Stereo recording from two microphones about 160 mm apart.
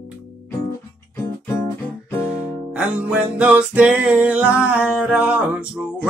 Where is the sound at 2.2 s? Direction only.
5° right (ahead or behind).